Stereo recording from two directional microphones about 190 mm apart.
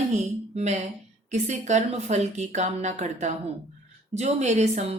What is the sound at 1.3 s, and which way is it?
A woman's voice, 40° right (ahead or behind).